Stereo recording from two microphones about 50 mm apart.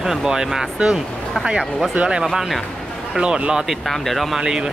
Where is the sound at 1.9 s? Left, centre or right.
Right.